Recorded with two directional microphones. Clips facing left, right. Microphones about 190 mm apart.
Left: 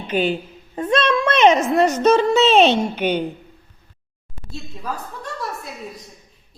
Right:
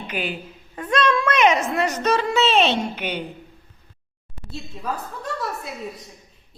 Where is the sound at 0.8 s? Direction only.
25° left (ahead or behind).